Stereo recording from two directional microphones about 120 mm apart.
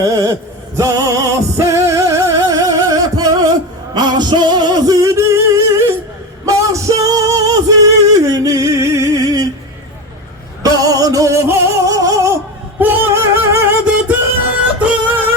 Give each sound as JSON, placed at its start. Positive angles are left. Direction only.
{"t": 0.0, "sound": "chant", "side_deg": -25}
{"t": 0.8, "sound": "music", "side_deg": -25}
{"t": 10.6, "sound": "music", "side_deg": -30}
{"t": 12.8, "sound": "music", "side_deg": -15}